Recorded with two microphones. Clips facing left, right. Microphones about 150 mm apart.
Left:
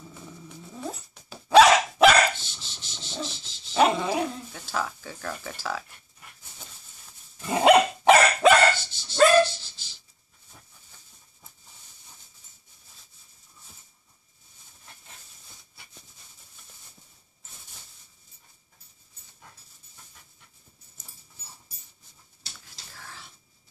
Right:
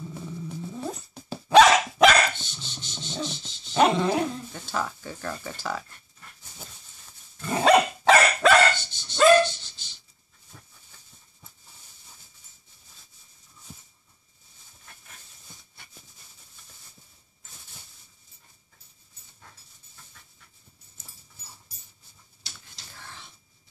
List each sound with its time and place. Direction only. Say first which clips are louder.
1.5 s dog: even; 5° left (ahead or behind)
5.6 s speech: even; centre (ahead or behind)
7.4 s dog: left 1 dB; 15° left (ahead or behind)
8.7 s dog: even; centre (ahead or behind)
9.1 s dog: even; 35° left (ahead or behind)
9.6 s a sound: even; centre (ahead or behind)
22.9 s a sound: even; centre (ahead or behind)